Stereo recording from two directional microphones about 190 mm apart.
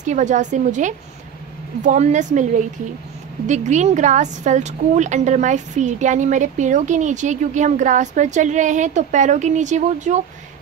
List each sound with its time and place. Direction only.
0.0 s a woman's voice: 40° right (ahead or behind)
3.4 s a woman's voice: 40° right (ahead or behind)